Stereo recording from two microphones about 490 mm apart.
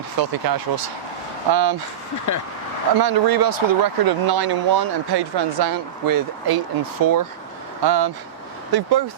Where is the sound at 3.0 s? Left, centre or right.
Right.